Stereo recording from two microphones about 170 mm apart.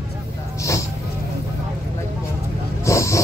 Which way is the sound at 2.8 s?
15° left (ahead or behind).